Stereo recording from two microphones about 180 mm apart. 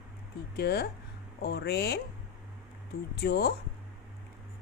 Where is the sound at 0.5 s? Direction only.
65° left (ahead or behind).